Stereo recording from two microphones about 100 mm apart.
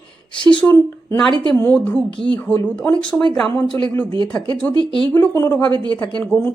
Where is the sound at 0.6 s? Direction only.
10° left (ahead or behind).